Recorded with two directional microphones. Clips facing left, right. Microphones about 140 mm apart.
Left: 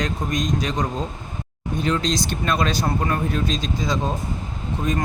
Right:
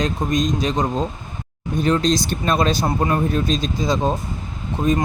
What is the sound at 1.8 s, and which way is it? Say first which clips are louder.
Speech: right 4 dB; 35° right (ahead or behind).